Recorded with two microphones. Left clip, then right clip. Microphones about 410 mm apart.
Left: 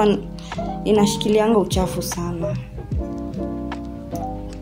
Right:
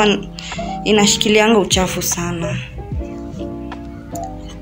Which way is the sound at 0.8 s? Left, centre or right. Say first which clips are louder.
Right 4 dB; left.